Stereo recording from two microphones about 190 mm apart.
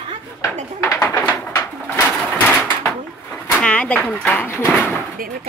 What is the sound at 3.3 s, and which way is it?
Speech, 5° left (ahead or behind).